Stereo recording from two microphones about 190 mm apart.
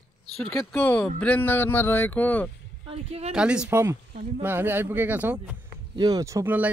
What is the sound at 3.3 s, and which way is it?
Speech, 5° right (ahead or behind).